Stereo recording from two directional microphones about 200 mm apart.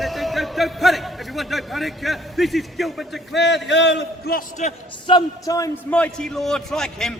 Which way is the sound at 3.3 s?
60° left (ahead or behind).